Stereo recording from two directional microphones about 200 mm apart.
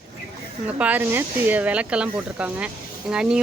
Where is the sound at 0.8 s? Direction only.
10° right (ahead or behind).